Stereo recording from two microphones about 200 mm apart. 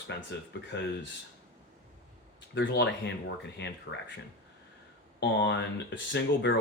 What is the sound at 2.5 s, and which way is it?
Speech, 60° left (ahead or behind).